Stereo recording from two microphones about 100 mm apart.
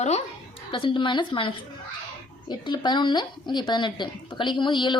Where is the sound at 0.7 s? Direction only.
60° left (ahead or behind).